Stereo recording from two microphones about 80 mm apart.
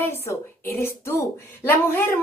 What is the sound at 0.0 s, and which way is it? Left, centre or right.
A woman's voice, left.